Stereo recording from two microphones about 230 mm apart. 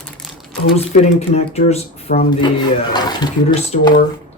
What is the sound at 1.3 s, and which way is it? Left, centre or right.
Speech, left.